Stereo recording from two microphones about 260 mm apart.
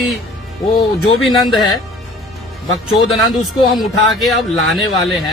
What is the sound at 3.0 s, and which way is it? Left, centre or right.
Speech, centre.